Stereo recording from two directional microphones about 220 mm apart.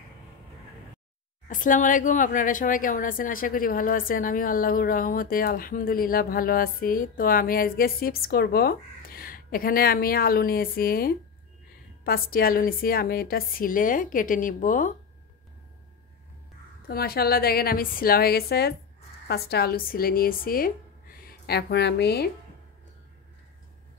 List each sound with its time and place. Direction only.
1.5 s speech: 35° left (ahead or behind)
16.8 s a woman's voice: 45° left (ahead or behind)